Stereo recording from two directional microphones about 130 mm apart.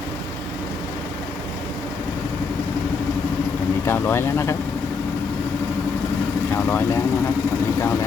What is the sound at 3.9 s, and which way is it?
Speech, 20° left (ahead or behind).